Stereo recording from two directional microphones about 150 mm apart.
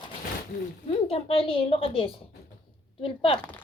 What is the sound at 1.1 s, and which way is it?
A woman's voice, 40° left (ahead or behind).